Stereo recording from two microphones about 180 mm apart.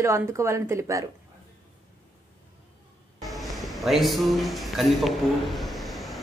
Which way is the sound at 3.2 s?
Centre (ahead or behind).